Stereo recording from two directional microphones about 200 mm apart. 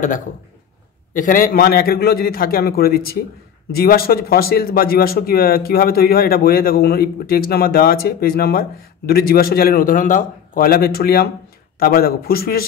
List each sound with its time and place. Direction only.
1.1 s speech: 45° left (ahead or behind)